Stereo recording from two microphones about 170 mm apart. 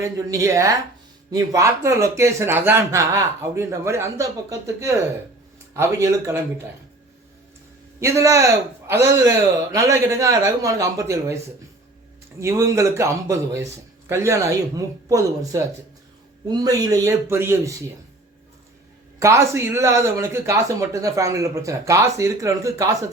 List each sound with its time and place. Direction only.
0.0 s a man's voice: 20° right (ahead or behind)
7.9 s a man's voice: 15° right (ahead or behind)
12.4 s a man's voice: 15° right (ahead or behind)
19.2 s a man's voice: 15° right (ahead or behind)